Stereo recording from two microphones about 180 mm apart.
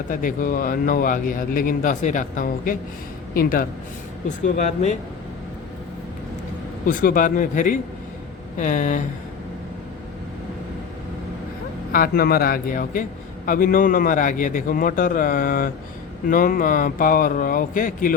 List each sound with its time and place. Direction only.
0.1 s a man's voice: 50° left (ahead or behind)
4.4 s a man's voice: 45° left (ahead or behind)
6.8 s a man's voice: 50° left (ahead or behind)
11.9 s a man's voice: 55° left (ahead or behind)